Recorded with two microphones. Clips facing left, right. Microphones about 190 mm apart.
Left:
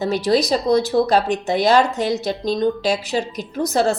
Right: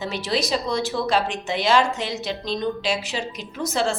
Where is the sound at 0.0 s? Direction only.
40° left (ahead or behind).